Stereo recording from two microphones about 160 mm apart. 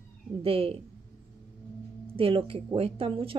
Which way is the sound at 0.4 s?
35° right (ahead or behind).